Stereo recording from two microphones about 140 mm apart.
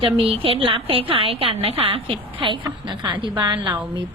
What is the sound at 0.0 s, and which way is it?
A woman's voice, 40° right (ahead or behind).